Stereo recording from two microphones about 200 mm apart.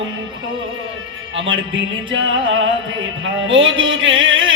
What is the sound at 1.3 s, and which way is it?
Music, 70° right (ahead or behind).